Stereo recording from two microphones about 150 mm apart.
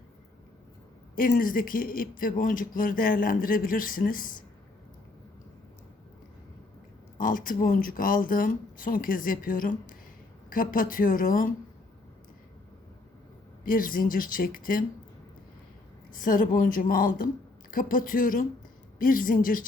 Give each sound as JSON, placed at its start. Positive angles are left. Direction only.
{"t": 1.1, "sound": "speech", "side_deg": 70}
{"t": 7.2, "sound": "speech", "side_deg": 70}
{"t": 13.7, "sound": "speech", "side_deg": 70}
{"t": 16.2, "sound": "speech", "side_deg": 65}